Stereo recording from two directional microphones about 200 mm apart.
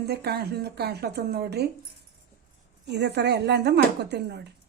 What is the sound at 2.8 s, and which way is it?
Speech, 55° right (ahead or behind).